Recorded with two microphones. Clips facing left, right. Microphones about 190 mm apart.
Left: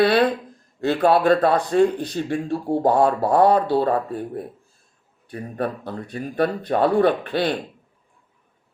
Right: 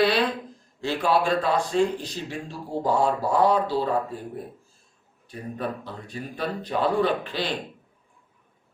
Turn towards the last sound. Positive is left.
turn(degrees=55)  # may be behind; listen again after turning